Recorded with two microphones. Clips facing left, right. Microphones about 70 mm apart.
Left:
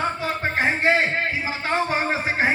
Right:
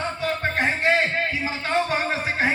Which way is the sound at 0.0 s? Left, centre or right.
Centre.